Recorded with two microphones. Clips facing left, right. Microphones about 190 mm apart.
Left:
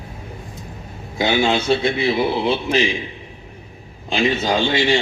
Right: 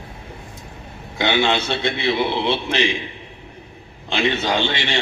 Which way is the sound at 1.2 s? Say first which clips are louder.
Left 2 dB; 10° left (ahead or behind).